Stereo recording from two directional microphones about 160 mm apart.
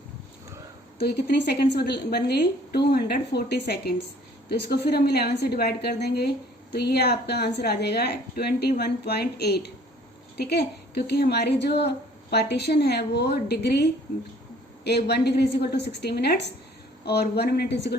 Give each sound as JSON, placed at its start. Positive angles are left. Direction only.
{"t": 0.9, "sound": "a woman's voice", "side_deg": 90}